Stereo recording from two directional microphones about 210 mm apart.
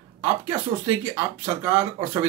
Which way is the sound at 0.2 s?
15° right (ahead or behind).